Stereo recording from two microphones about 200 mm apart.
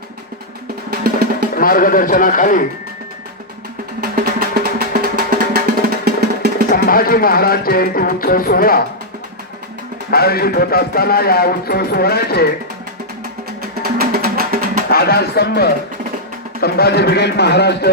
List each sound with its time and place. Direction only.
0.9 s music: 50° right (ahead or behind)
1.5 s speech: 45° left (ahead or behind)
4.0 s music: 50° right (ahead or behind)
6.7 s speech: 45° left (ahead or behind)
10.1 s speech: 50° left (ahead or behind)
13.6 s music: 50° right (ahead or behind)
14.8 s a man's voice: 50° left (ahead or behind)